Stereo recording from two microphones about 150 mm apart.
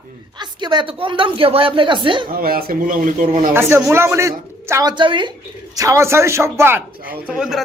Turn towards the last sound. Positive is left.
turn(degrees=-5)  # may be behind; listen again after turning